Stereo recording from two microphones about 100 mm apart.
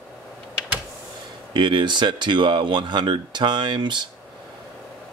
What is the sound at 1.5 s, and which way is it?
Speech, 55° right (ahead or behind).